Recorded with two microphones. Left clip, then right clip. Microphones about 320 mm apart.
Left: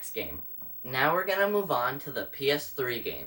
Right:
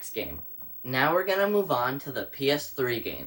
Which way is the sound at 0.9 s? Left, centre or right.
Right.